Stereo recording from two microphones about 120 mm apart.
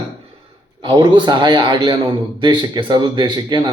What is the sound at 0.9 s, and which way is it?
A man's voice, 40° right (ahead or behind).